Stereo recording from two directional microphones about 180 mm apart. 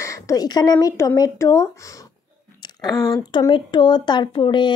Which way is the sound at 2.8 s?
25° left (ahead or behind).